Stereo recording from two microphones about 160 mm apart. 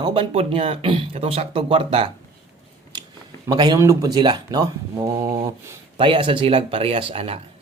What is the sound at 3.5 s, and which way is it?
Speech, 25° right (ahead or behind).